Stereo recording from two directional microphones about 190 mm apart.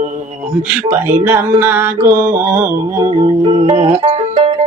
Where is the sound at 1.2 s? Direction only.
10° right (ahead or behind).